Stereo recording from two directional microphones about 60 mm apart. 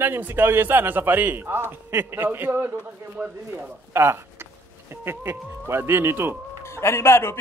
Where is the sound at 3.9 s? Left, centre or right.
Right.